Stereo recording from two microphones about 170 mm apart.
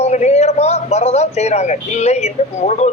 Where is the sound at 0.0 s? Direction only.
40° left (ahead or behind).